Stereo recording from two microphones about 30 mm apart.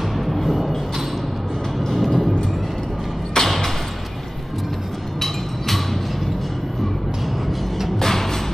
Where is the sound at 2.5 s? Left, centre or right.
Centre.